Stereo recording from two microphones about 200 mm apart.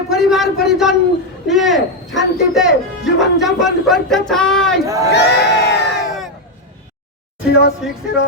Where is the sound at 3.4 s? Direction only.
Centre (ahead or behind).